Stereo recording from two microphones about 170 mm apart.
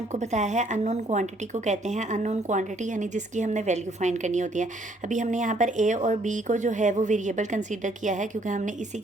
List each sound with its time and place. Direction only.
0.1 s a woman's voice: 45° right (ahead or behind)